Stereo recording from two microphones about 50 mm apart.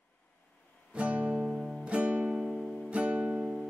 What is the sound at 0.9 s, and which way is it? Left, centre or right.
Guitar, right.